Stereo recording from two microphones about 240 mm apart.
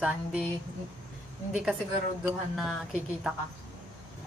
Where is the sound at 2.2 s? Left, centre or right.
Centre.